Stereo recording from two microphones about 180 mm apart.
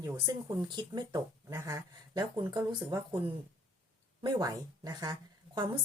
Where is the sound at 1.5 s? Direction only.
15° right (ahead or behind).